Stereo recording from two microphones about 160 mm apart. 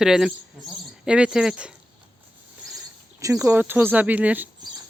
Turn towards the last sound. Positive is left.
turn(degrees=-10)  # may be behind; listen again after turning